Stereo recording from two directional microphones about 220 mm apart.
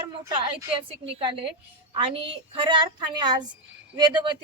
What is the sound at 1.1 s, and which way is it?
A woman's voice, 25° right (ahead or behind).